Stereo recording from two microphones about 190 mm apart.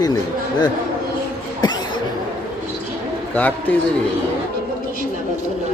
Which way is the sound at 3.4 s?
10° left (ahead or behind).